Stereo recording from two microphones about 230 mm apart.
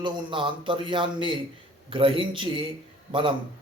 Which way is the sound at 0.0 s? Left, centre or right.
Right.